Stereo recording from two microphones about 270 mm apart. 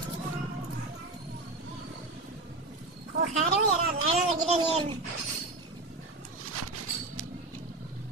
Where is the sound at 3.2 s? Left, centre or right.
Right.